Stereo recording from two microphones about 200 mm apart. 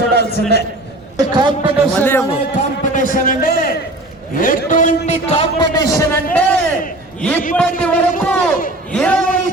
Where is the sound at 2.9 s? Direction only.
40° left (ahead or behind).